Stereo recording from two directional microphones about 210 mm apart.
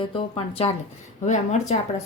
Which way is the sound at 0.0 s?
25° left (ahead or behind).